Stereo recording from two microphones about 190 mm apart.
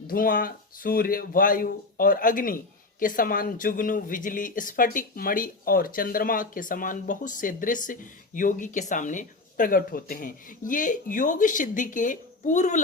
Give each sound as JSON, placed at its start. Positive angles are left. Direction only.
{"t": 0.1, "sound": "speech", "side_deg": 50}